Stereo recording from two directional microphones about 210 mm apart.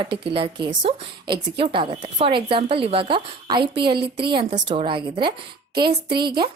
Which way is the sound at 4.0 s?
50° right (ahead or behind).